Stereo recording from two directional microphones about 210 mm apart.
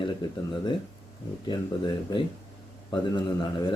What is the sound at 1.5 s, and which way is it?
Speech, 20° left (ahead or behind).